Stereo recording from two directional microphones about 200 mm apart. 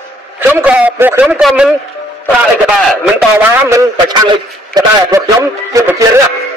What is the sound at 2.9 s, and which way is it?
A man's voice, 10° right (ahead or behind).